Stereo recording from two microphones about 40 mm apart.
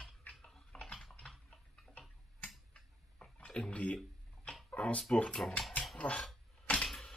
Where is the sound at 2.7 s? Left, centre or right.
Left.